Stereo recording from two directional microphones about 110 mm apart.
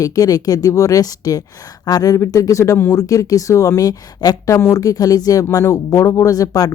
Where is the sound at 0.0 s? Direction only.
35° left (ahead or behind).